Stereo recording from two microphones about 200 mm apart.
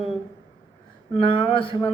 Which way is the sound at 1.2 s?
25° left (ahead or behind).